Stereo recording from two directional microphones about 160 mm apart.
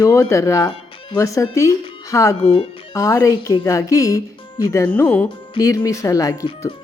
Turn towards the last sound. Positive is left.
turn(degrees=20)  # may be behind; listen again after turning